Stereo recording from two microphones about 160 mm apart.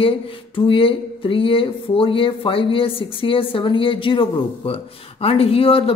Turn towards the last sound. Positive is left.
turn(degrees=35)  # may be behind; listen again after turning